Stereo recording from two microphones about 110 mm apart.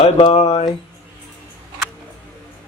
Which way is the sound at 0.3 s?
70° left (ahead or behind).